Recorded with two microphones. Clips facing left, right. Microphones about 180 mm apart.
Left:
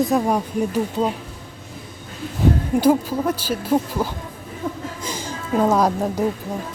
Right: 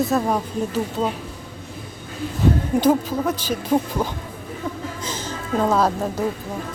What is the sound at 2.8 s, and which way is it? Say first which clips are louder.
Speech: left 2 dB; 10° left (ahead or behind).